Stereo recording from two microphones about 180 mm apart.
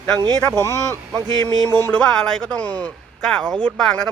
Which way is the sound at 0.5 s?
15° left (ahead or behind).